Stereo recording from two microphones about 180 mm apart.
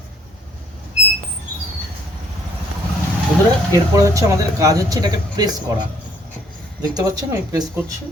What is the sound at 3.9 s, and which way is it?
Speech, 15° right (ahead or behind).